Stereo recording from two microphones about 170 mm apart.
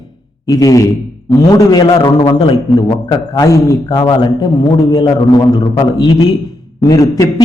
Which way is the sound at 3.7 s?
25° left (ahead or behind).